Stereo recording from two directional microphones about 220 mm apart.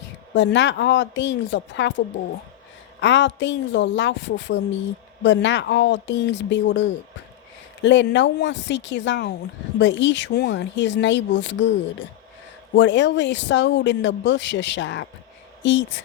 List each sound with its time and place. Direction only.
0.3 s speech: 55° left (ahead or behind)
3.0 s speech: 55° left (ahead or behind)
12.7 s speech: 55° left (ahead or behind)